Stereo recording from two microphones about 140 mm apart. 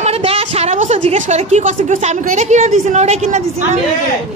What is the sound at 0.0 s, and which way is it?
A woman's voice, 45° right (ahead or behind).